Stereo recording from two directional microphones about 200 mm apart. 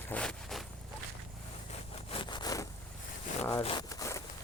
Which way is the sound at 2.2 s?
20° left (ahead or behind).